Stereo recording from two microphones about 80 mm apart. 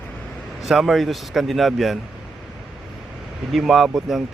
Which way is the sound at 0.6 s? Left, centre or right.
Centre.